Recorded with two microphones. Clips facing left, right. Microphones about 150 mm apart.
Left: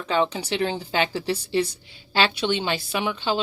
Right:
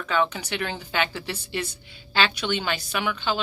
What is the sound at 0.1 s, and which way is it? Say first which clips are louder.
A woman's voice: left 2 dB; 30° left (ahead or behind).